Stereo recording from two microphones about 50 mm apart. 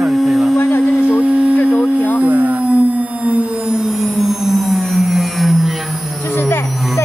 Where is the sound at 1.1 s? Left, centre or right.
Right.